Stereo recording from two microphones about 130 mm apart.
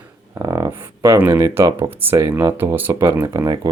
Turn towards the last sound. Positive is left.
turn(degrees=-25)  # may be behind; listen again after turning